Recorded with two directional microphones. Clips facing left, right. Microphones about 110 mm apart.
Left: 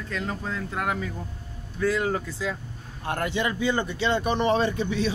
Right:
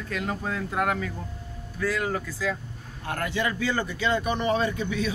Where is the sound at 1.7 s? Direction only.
25° left (ahead or behind).